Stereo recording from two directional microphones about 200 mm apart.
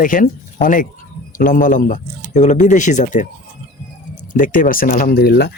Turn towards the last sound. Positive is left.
turn(degrees=55)  # may be behind; listen again after turning